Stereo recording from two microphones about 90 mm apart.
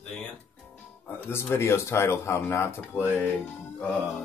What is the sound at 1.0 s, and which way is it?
A man's voice, 25° left (ahead or behind).